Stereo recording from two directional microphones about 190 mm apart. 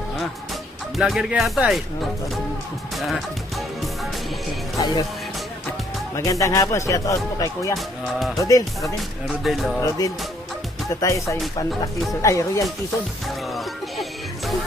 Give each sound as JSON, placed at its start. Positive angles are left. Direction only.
{"t": 0.9, "sound": "speech", "side_deg": 0}
{"t": 3.0, "sound": "fowl", "side_deg": 0}
{"t": 4.7, "sound": "speech", "side_deg": 20}
{"t": 6.1, "sound": "speech", "side_deg": 15}
{"t": 9.4, "sound": "speech", "side_deg": 0}
{"t": 9.8, "sound": "speech", "side_deg": 15}